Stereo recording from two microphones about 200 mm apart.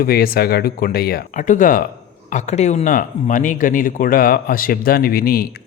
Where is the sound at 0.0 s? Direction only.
50° left (ahead or behind).